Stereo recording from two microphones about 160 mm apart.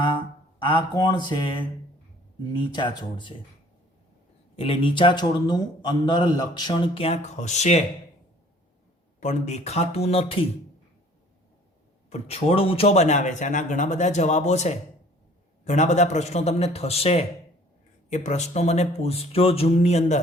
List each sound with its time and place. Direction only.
0.6 s speech: 30° left (ahead or behind)
4.5 s a man's voice: 35° left (ahead or behind)
9.2 s a man's voice: 45° left (ahead or behind)
12.1 s a man's voice: 40° left (ahead or behind)